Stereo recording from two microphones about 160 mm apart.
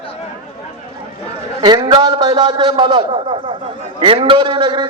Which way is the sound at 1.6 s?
25° right (ahead or behind).